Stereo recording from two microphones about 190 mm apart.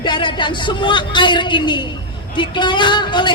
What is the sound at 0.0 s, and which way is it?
Speech, 25° left (ahead or behind).